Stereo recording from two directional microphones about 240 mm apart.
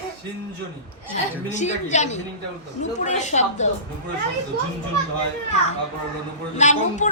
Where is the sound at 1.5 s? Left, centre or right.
Left.